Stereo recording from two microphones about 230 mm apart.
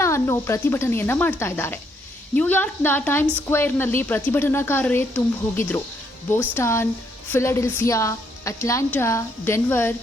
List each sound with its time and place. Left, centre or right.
0.0 s a woman's voice: centre